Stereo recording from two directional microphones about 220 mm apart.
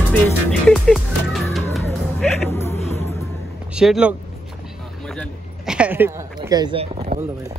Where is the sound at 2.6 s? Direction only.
30° left (ahead or behind).